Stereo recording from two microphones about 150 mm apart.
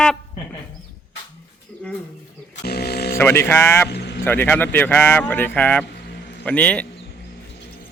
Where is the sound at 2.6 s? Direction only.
90° left.